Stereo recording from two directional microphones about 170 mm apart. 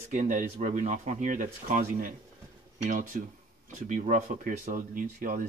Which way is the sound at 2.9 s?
50° right (ahead or behind).